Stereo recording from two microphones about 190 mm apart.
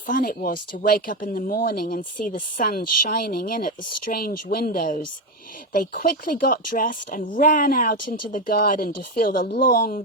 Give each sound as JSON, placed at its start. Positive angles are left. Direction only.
{"t": 0.1, "sound": "speech", "side_deg": 45}